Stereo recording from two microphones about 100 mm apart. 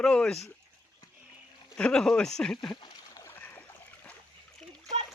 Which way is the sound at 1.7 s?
10° left (ahead or behind).